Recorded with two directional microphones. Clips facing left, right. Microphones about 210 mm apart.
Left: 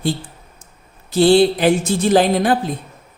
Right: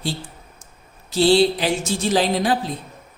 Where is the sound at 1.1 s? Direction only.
55° left (ahead or behind).